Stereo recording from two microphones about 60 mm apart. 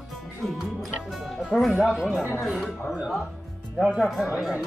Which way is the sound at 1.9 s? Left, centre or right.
Centre.